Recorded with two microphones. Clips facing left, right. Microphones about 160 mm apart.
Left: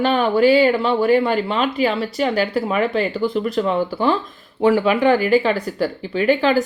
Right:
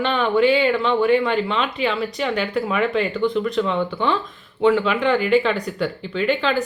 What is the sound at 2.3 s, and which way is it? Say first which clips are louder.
Speech: left 3 dB; 5° left (ahead or behind).